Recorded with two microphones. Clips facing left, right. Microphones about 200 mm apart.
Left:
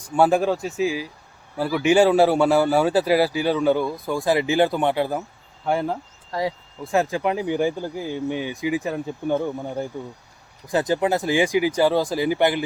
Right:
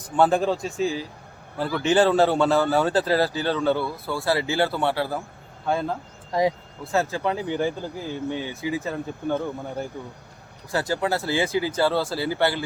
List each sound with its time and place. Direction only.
0.0 s a man's voice: 10° left (ahead or behind)